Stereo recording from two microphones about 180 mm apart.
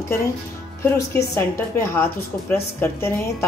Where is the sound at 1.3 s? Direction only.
15° left (ahead or behind).